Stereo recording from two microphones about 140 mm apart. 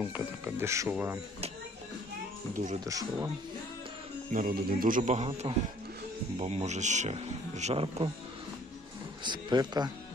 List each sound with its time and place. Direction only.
0.0 s speech: 10° right (ahead or behind)
2.5 s speech: 65° right (ahead or behind)
2.8 s speech: 25° right (ahead or behind)
4.3 s a man's voice: 80° right; by 8.1 s 40° right (ahead or behind)
9.2 s speech: 30° right (ahead or behind)